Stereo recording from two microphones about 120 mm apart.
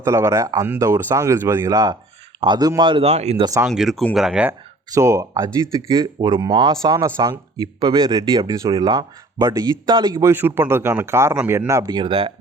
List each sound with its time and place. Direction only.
0.0 s speech: 25° right (ahead or behind)
1.7 s speech: 35° right (ahead or behind)
3.0 s speech: 65° right (ahead or behind)
3.7 s speech: centre (ahead or behind)
4.9 s speech: 25° right (ahead or behind)
11.9 s speech: 45° right (ahead or behind)